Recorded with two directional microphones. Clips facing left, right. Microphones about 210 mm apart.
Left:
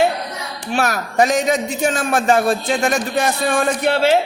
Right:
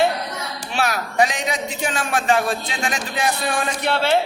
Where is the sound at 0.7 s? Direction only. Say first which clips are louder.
Left 4 dB; 50° left (ahead or behind).